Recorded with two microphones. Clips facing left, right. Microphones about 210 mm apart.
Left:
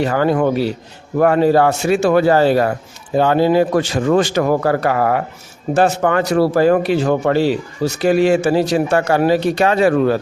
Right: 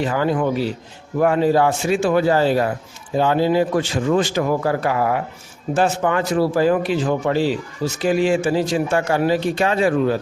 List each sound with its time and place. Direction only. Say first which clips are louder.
0.0 s a man's voice: left 4 dB; 65° left (ahead or behind)